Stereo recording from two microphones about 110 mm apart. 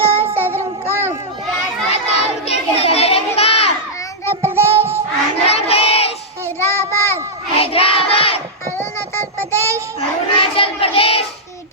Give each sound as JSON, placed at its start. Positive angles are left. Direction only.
{"t": 0.0, "sound": "child singing", "side_deg": -20}
{"t": 0.3, "sound": "music", "side_deg": -20}
{"t": 1.9, "sound": "children playing", "side_deg": 70}
{"t": 4.3, "sound": "child singing", "side_deg": -25}
{"t": 5.5, "sound": "crowd", "side_deg": 65}
{"t": 6.6, "sound": "child singing", "side_deg": 25}
{"t": 7.6, "sound": "child singing", "side_deg": 60}
{"t": 9.0, "sound": "child singing", "side_deg": 20}
{"t": 9.6, "sound": "child singing", "side_deg": -25}
{"t": 10.0, "sound": "child singing", "side_deg": 55}